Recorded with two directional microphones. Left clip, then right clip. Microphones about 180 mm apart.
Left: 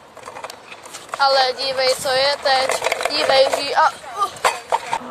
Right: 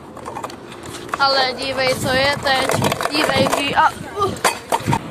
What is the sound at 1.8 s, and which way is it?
Speech, 15° left (ahead or behind).